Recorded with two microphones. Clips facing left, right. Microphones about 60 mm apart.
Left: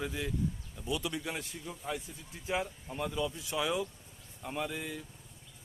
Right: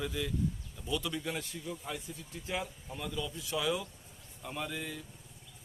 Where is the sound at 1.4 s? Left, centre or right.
Left.